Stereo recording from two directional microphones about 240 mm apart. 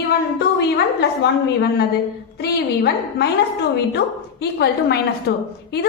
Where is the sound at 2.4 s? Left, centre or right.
Left.